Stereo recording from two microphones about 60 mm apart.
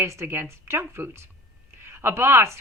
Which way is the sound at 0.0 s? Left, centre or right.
Right.